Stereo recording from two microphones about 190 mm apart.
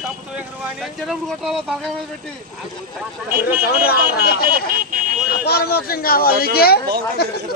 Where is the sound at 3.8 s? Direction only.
55° left (ahead or behind).